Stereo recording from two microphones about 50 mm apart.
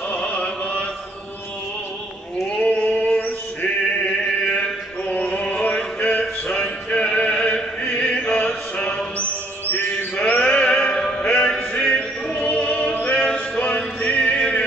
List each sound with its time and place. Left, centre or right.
0.1 s chant: left
2.6 s a sound: left
4.0 s chant: left
5.8 s music: centre
8.5 s a sound: left
12.4 s choir: left
13.7 s music: left